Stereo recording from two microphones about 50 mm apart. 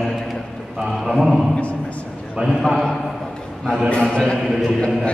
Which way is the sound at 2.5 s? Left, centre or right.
Centre.